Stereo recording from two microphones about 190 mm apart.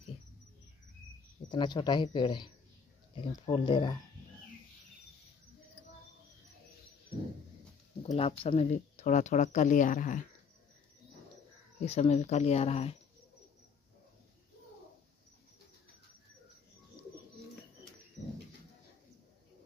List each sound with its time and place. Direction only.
1.5 s speech: 25° left (ahead or behind)
8.0 s speech: 35° left (ahead or behind)
11.8 s speech: 35° left (ahead or behind)